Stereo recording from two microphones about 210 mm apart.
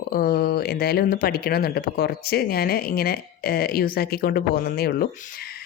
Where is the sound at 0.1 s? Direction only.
45° left (ahead or behind).